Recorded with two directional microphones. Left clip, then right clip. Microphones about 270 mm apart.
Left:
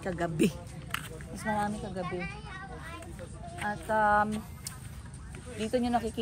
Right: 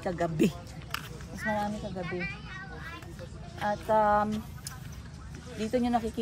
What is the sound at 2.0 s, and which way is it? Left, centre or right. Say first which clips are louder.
Speech: right 2 dB; left.